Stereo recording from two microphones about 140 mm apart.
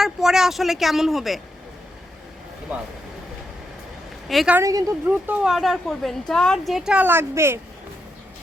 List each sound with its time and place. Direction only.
0.0 s a woman's voice: 5° right (ahead or behind)
4.3 s a woman's voice: centre (ahead or behind)
4.5 s speech: 25° right (ahead or behind)
5.0 s a woman's voice: 10° right (ahead or behind)